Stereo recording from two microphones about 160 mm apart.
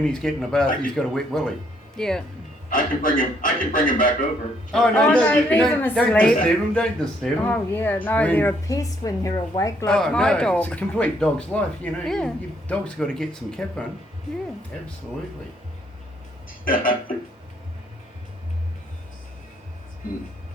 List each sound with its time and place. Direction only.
0.0 s speech: 5° left (ahead or behind)
2.6 s a man's voice: 55° left (ahead or behind)
4.7 s speech: 5° left (ahead or behind); by 9.7 s 20° left (ahead or behind)
9.8 s speech: 5° left (ahead or behind)
16.5 s speech: 60° left (ahead or behind)